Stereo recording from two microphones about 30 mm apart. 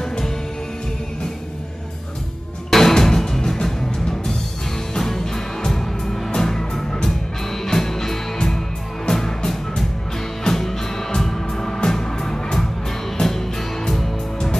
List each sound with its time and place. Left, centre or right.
2.7 s music: centre